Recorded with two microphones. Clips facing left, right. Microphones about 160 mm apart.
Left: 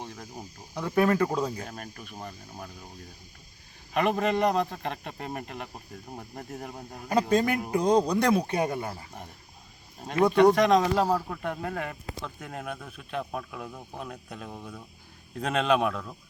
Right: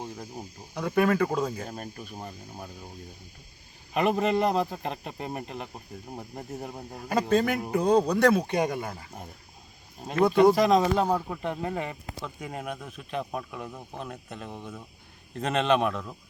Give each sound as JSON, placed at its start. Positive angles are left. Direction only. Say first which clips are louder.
{"t": 0.0, "sound": "cricket", "louder": "right 3 dB", "side_deg": -5}
{"t": 0.8, "sound": "speech", "louder": "even", "side_deg": 0}
{"t": 4.0, "sound": "speech", "louder": "right 1 dB", "side_deg": -5}
{"t": 8.2, "sound": "speech", "louder": "right 2 dB", "side_deg": 10}
{"t": 10.2, "sound": "speech", "louder": "even", "side_deg": -5}
{"t": 11.6, "sound": "speech", "louder": "right 2 dB", "side_deg": -25}
{"t": 11.9, "sound": "speech", "louder": "even", "side_deg": -5}